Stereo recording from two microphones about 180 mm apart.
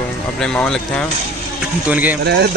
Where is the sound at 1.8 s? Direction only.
10° right (ahead or behind).